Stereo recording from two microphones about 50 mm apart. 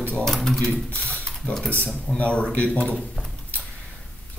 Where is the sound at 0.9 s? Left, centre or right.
Left.